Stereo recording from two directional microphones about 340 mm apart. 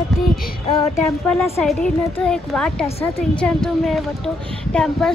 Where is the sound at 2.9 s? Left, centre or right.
Centre.